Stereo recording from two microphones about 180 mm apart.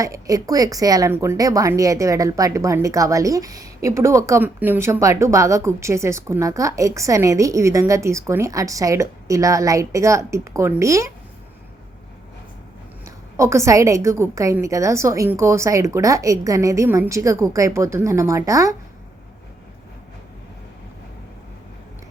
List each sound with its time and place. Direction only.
0.0 s speech: 20° right (ahead or behind)
13.1 s speech: 15° right (ahead or behind)